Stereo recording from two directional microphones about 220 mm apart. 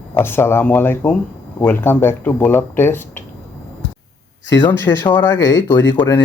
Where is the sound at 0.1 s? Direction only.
10° left (ahead or behind).